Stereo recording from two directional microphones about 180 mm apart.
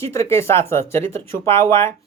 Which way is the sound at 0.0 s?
15° left (ahead or behind).